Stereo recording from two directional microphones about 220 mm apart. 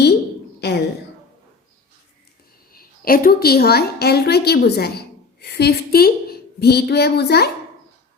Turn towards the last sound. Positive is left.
turn(degrees=45)  # may be behind; listen again after turning